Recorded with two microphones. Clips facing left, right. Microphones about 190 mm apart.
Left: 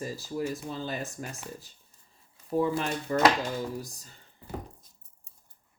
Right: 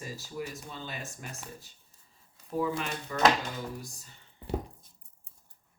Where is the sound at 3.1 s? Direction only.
40° left (ahead or behind).